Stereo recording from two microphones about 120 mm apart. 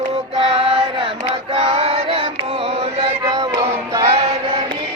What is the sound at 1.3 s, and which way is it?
Female singing, 55° right (ahead or behind).